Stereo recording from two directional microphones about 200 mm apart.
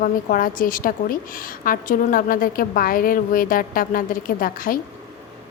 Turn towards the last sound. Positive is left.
turn(degrees=45)  # may be behind; listen again after turning